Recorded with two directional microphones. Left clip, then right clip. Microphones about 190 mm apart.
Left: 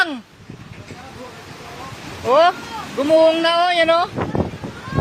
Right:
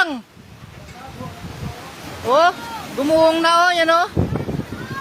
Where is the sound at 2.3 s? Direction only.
15° right (ahead or behind).